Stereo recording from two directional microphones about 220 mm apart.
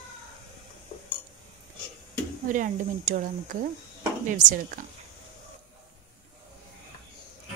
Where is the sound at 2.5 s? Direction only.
35° right (ahead or behind).